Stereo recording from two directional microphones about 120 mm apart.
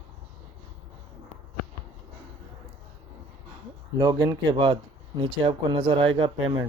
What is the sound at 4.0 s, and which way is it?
Speech, 30° right (ahead or behind).